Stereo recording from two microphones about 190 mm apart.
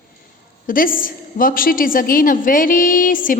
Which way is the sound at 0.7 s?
45° left (ahead or behind).